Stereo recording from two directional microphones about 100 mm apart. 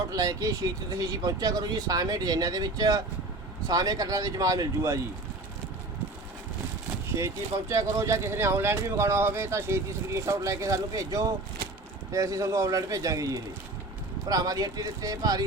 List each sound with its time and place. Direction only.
0.1 s speech: 40° right (ahead or behind)
7.2 s speech: 30° right (ahead or behind)